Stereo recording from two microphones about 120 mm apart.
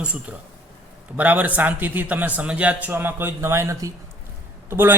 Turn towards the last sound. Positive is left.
turn(degrees=-20)  # may be behind; listen again after turning